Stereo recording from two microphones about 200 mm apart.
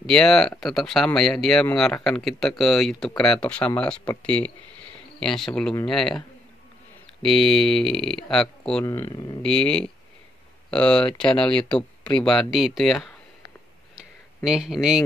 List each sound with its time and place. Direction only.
0.0 s speech: centre (ahead or behind)
8.8 s speech: 15° left (ahead or behind)
9.4 s speech: 5° left (ahead or behind)
13.9 s a sound: 5° right (ahead or behind)